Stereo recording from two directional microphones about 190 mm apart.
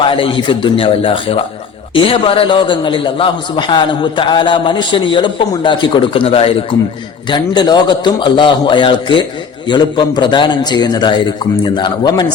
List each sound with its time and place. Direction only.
0.0 s a man's voice: 25° left (ahead or behind)